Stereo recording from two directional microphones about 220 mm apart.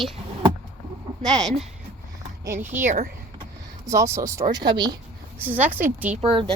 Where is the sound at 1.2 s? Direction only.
Centre (ahead or behind).